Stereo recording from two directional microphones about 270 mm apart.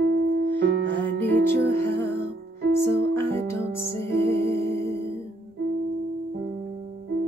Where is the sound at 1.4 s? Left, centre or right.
Centre.